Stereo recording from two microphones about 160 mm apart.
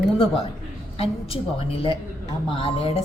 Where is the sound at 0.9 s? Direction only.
35° left (ahead or behind).